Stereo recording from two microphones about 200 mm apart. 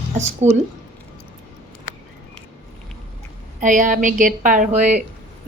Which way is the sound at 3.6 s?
40° right (ahead or behind).